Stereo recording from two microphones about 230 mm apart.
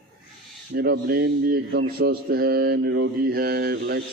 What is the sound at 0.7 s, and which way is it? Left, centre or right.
Mantra, right.